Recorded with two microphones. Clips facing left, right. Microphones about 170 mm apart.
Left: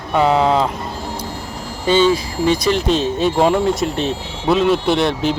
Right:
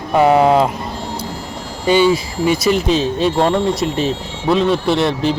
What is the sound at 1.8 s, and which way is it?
Speech, 10° right (ahead or behind).